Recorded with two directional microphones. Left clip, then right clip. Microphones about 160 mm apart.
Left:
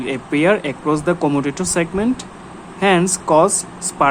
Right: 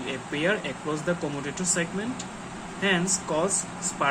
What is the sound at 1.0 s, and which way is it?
Speech, 75° left (ahead or behind).